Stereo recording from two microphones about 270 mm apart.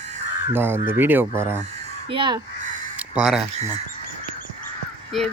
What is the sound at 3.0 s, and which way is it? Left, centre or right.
Speech, centre.